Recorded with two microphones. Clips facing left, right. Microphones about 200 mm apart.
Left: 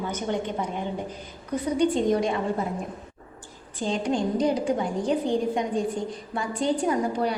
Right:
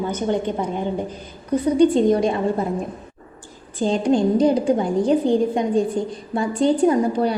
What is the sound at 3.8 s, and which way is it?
A woman's voice, 35° right (ahead or behind).